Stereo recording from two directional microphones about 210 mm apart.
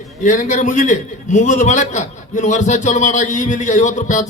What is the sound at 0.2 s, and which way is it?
A man's voice, 35° left (ahead or behind).